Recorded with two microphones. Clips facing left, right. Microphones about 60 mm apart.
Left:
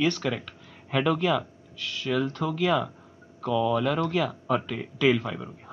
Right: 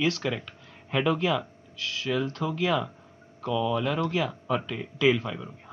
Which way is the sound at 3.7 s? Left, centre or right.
Centre.